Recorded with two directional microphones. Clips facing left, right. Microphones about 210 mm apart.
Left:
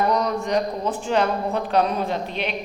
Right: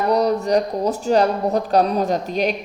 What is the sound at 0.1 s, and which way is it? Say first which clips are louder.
A woman's voice: right 5 dB; 35° right (ahead or behind).